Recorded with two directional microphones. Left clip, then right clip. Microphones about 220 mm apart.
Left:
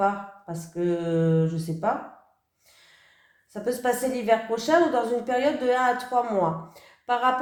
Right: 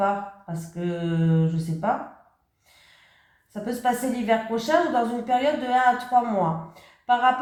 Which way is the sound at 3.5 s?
45° left (ahead or behind).